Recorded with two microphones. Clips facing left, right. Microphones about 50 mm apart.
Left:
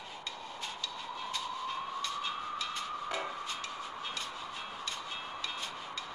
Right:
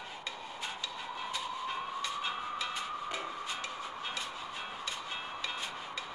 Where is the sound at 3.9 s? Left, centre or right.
Centre.